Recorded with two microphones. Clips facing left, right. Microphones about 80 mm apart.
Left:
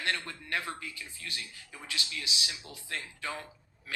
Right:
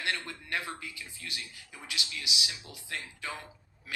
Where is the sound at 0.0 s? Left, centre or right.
Centre.